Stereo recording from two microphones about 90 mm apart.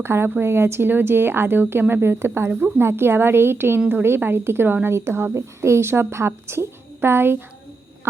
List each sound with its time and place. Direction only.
0.0 s a woman's voice: 25° right (ahead or behind)